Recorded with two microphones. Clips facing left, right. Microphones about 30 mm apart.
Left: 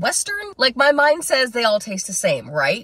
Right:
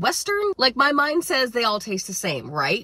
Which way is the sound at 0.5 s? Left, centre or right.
Left.